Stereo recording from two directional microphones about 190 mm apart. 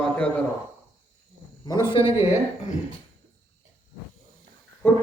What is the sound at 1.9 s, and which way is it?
Speech, 30° left (ahead or behind).